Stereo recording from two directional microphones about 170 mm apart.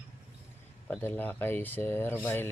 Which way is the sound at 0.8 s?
10° left (ahead or behind).